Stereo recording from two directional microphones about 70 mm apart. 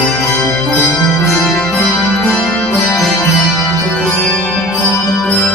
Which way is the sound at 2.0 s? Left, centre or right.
Centre.